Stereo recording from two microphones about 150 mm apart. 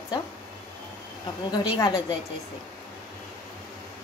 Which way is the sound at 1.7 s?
30° left (ahead or behind).